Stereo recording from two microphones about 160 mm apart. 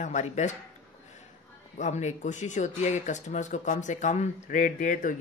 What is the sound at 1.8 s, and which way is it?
Speech, 45° left (ahead or behind).